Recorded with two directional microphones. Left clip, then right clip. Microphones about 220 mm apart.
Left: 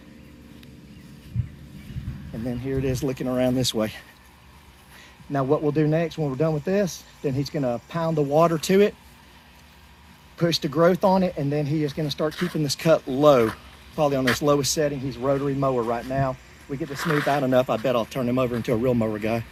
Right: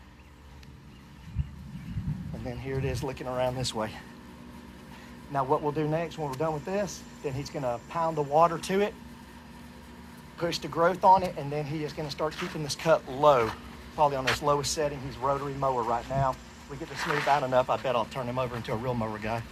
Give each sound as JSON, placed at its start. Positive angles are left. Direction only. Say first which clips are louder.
{"t": 2.4, "sound": "speech", "louder": "left 7 dB", "side_deg": -20}
{"t": 5.3, "sound": "speech", "louder": "left 5 dB", "side_deg": -30}
{"t": 10.3, "sound": "speech", "louder": "left 6 dB", "side_deg": -20}
{"t": 16.9, "sound": "speech", "louder": "left 2 dB", "side_deg": -15}
{"t": 17.4, "sound": "speech", "louder": "left 4 dB", "side_deg": -30}